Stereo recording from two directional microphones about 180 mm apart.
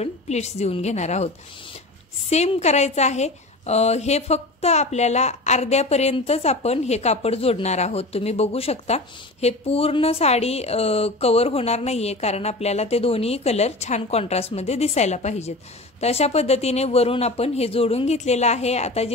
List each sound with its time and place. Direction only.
0.0 s a woman's voice: 35° left (ahead or behind)